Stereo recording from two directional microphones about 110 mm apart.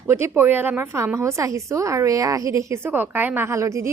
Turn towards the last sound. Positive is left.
turn(degrees=-25)  # may be behind; listen again after turning